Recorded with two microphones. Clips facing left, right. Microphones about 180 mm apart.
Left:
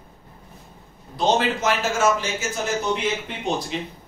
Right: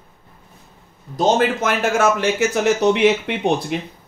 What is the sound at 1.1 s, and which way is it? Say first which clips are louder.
Speech: right 4 dB; 50° right (ahead or behind).